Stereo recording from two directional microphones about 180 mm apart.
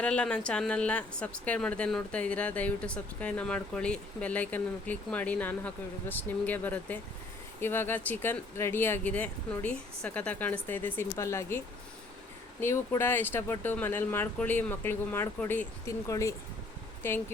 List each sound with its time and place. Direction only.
0.0 s a woman's voice: 5° left (ahead or behind)